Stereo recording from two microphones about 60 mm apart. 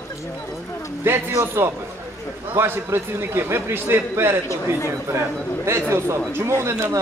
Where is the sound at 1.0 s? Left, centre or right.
Right.